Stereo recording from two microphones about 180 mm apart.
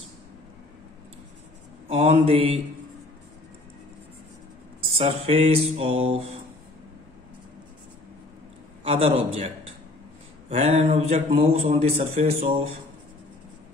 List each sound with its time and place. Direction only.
1.9 s a man's voice: 30° right (ahead or behind)
4.9 s a man's voice: 35° right (ahead or behind)
8.8 s a man's voice: 30° right (ahead or behind)
10.5 s a man's voice: 35° right (ahead or behind)